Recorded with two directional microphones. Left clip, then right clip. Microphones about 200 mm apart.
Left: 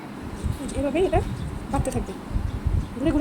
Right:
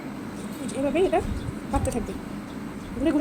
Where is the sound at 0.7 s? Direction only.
Centre (ahead or behind).